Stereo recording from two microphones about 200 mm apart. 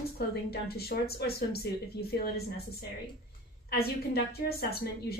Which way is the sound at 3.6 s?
50° left (ahead or behind).